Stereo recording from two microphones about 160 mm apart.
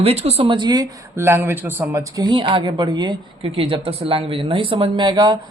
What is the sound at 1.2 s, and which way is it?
Speech, 15° right (ahead or behind).